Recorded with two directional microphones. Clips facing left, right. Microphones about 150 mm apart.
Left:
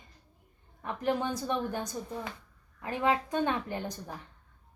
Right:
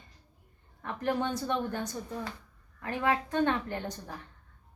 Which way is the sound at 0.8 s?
15° left (ahead or behind).